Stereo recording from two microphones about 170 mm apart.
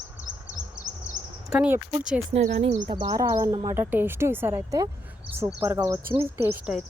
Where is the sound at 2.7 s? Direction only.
25° right (ahead or behind).